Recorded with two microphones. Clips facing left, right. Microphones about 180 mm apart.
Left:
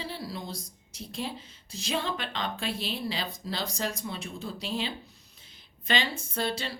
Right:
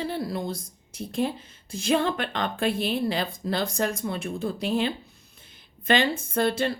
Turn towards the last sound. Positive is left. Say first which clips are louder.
# right 8 dB
turn(degrees=-55)  # may be behind; listen again after turning